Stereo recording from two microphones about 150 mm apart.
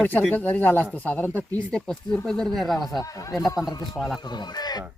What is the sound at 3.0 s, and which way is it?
Speech, 25° left (ahead or behind).